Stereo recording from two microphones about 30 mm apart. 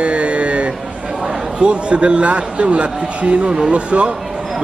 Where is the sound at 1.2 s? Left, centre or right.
Right.